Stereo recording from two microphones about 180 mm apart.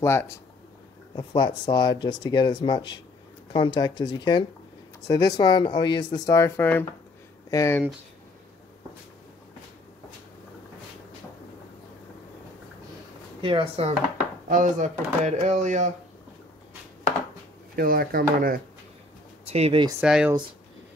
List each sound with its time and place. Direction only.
0.0 s speech: 15° left (ahead or behind)
1.1 s speech: 25° left (ahead or behind)
13.4 s speech: 30° right (ahead or behind)
14.5 s speech: 45° right (ahead or behind)
17.7 s speech: 55° right (ahead or behind)
19.4 s speech: 35° right (ahead or behind)
20.0 s speech: 5° right (ahead or behind)